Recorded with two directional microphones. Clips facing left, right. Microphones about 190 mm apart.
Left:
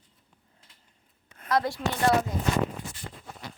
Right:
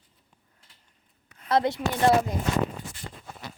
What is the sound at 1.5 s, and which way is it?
Speech, 25° right (ahead or behind).